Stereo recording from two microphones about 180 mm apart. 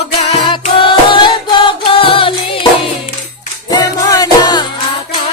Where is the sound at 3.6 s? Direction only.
20° left (ahead or behind).